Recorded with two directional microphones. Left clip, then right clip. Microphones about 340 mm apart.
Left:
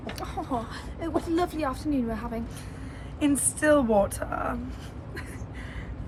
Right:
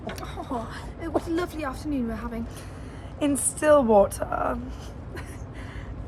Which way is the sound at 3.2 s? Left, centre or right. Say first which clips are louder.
Even; centre.